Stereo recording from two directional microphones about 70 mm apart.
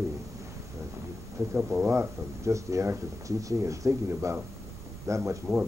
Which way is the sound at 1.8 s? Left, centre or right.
Right.